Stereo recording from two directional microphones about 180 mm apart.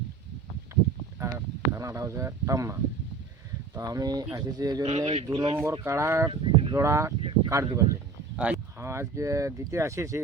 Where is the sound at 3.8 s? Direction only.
20° right (ahead or behind).